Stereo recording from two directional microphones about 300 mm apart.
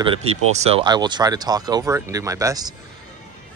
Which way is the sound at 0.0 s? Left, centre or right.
Centre.